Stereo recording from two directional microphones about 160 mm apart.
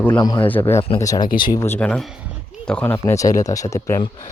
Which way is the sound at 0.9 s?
20° left (ahead or behind).